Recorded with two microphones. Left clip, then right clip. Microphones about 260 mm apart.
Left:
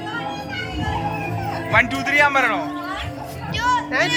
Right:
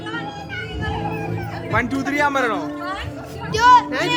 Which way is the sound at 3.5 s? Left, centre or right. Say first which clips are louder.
Right 8 dB; right.